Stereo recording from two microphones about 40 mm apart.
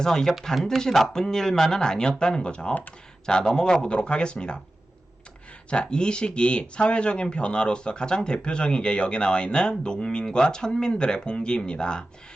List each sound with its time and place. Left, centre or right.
0.0 s speech: centre
0.5 s speech: centre
0.8 s speech: centre
5.7 s speech: left